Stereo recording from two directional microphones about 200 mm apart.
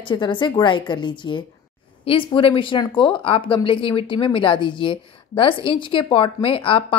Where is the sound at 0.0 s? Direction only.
25° left (ahead or behind).